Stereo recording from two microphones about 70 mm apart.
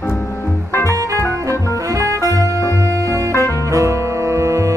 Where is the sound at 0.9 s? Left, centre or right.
Right.